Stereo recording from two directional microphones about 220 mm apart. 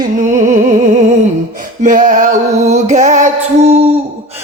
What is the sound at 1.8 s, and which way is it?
Music, 35° right (ahead or behind).